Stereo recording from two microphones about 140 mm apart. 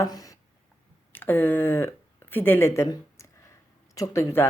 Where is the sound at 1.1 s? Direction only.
15° left (ahead or behind).